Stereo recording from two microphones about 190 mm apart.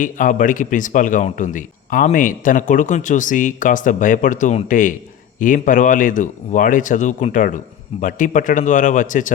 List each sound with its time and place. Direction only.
0.0 s speech: 45° left (ahead or behind)